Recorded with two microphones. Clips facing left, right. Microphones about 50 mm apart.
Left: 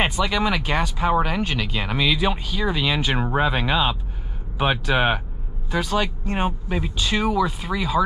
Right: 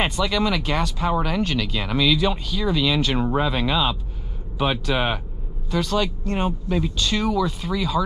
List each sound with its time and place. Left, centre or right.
0.2 s speech: centre